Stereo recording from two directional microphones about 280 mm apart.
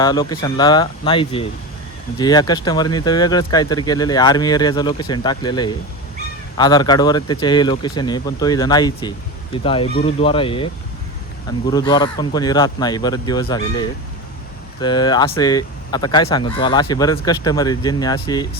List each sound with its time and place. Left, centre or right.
0.0 s speech: centre
11.7 s speech: centre